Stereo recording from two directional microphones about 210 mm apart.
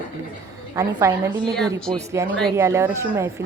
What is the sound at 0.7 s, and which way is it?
Speech, 15° right (ahead or behind).